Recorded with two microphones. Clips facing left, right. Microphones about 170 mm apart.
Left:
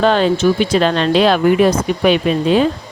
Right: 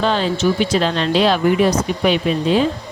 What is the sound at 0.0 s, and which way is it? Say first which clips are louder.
Speech: left 5 dB; 55° left (ahead or behind).